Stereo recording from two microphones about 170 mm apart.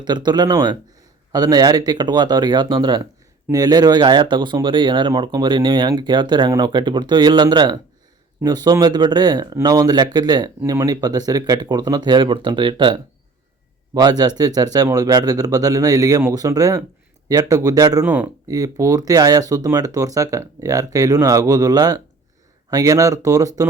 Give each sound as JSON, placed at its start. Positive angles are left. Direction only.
{"t": 0.0, "sound": "speech", "side_deg": -25}
{"t": 18.0, "sound": "speech", "side_deg": -10}
{"t": 18.4, "sound": "speech", "side_deg": -20}